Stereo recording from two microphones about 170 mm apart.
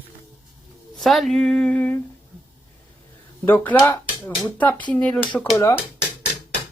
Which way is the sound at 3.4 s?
10° left (ahead or behind).